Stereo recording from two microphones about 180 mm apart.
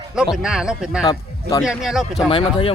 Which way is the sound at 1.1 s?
20° left (ahead or behind).